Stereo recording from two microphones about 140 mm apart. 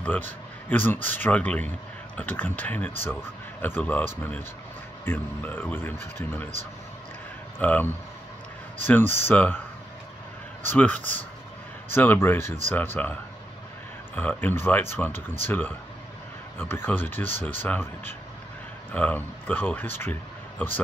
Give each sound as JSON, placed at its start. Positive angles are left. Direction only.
{"t": 0.0, "sound": "speech", "side_deg": 10}
{"t": 7.5, "sound": "speech", "side_deg": 15}
{"t": 10.6, "sound": "speech", "side_deg": 10}
{"t": 14.1, "sound": "speech", "side_deg": 15}